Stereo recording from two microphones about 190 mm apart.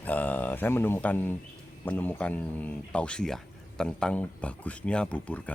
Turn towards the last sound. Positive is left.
turn(degrees=5)  # may be behind; listen again after turning